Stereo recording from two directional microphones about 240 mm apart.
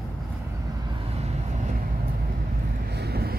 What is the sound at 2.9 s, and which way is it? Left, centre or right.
Vehicle, right.